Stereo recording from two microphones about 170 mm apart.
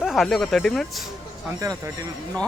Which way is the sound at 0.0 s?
Centre (ahead or behind).